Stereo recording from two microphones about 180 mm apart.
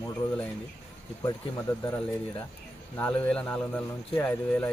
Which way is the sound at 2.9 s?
10° left (ahead or behind).